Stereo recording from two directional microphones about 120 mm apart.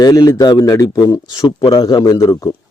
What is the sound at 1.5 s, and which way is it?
Speech, 45° left (ahead or behind).